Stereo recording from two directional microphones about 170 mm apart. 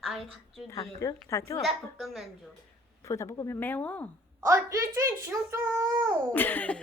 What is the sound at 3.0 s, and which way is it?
Speech, 15° left (ahead or behind).